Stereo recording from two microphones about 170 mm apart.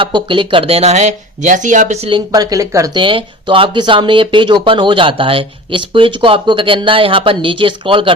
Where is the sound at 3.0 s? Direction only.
30° right (ahead or behind).